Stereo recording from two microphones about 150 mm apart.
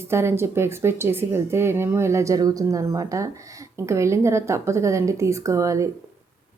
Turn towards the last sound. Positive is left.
turn(degrees=-20)  # may be behind; listen again after turning